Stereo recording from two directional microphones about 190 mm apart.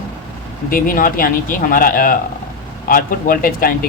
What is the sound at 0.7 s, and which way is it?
Speech, 45° left (ahead or behind).